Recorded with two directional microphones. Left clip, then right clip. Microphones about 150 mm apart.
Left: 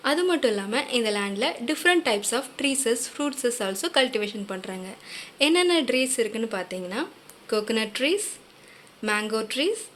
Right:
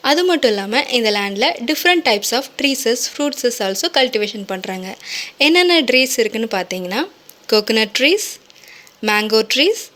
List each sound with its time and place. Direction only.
0.0 s a woman's voice: 45° right (ahead or behind)